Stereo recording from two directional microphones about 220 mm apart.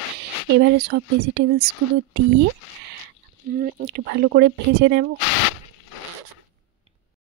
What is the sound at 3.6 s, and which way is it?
Speech, 45° right (ahead or behind).